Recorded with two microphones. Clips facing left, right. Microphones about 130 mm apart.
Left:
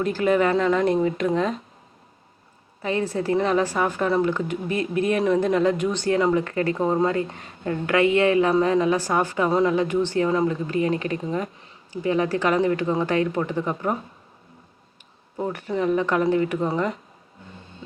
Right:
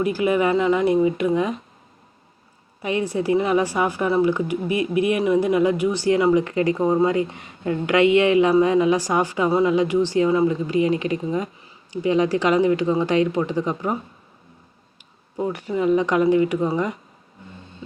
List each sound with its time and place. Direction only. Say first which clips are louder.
0.0 s a woman's voice: right 1 dB; 10° right (ahead or behind)
2.8 s a woman's voice: right 2 dB; 15° right (ahead or behind)
15.4 s a woman's voice: right 2 dB; 15° right (ahead or behind)